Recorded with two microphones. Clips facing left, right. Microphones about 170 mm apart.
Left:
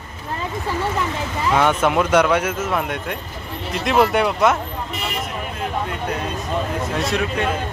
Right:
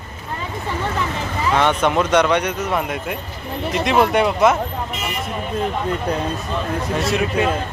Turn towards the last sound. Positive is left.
turn(degrees=0)  # may be behind; listen again after turning